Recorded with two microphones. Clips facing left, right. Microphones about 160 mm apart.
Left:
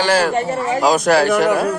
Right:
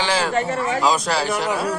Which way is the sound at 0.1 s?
45° left (ahead or behind).